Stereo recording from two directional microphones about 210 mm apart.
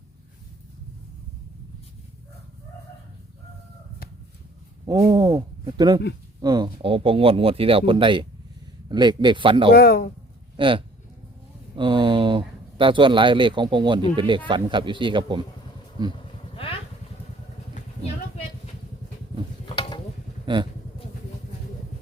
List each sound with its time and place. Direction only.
4.9 s speech: 15° right (ahead or behind)
9.7 s speech: 50° left (ahead or behind)
10.6 s speech: 25° right (ahead or behind)
16.2 s a sound: 25° left (ahead or behind)
19.6 s a sound: 25° left (ahead or behind)
20.5 s speech: 20° right (ahead or behind)